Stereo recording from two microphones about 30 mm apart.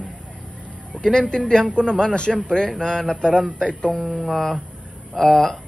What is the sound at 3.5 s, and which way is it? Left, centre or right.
Speech, left.